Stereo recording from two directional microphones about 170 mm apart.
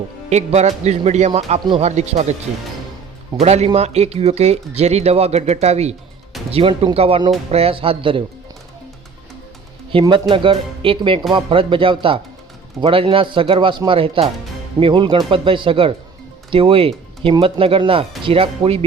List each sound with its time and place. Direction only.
0.3 s speech: 40° right (ahead or behind)
1.6 s speech: 30° right (ahead or behind)
2.0 s speech: 40° right (ahead or behind)
3.4 s speech: 40° right (ahead or behind)
9.9 s speech: 30° right (ahead or behind)